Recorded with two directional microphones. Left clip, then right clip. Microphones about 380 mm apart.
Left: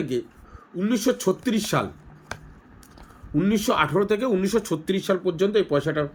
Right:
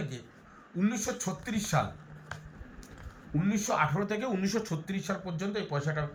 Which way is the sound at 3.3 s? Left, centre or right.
Left.